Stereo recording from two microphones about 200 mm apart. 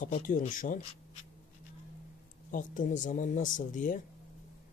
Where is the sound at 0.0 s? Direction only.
40° left (ahead or behind).